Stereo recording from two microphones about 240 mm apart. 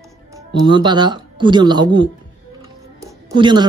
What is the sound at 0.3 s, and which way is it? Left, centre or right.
Speech, centre.